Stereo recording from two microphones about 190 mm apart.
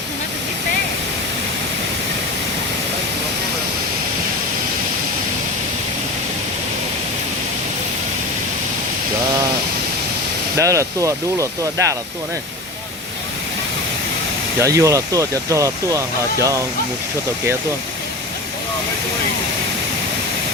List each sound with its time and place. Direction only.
10.6 s speech: 15° right (ahead or behind)
14.6 s speech: 15° right (ahead or behind)